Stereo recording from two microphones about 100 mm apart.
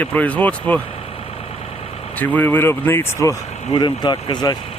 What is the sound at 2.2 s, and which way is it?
Speech, 20° left (ahead or behind).